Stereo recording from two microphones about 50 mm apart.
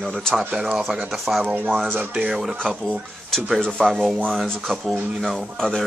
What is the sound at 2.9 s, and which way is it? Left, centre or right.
Speech, centre.